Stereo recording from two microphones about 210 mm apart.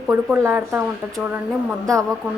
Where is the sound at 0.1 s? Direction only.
10° right (ahead or behind).